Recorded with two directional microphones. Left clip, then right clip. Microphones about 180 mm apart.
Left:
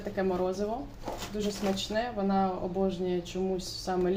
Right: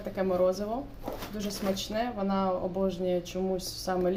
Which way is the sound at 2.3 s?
15° right (ahead or behind).